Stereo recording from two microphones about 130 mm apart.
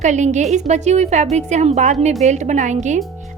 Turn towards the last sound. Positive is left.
turn(degrees=-65)  # may be behind; listen again after turning